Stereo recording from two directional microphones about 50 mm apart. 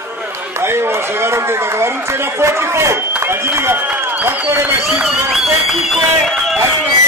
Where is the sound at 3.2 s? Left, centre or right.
Right.